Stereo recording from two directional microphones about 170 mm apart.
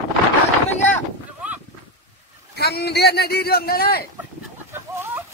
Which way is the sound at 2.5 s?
70° left (ahead or behind).